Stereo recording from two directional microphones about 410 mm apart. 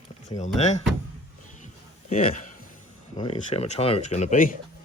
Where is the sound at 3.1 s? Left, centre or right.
Centre.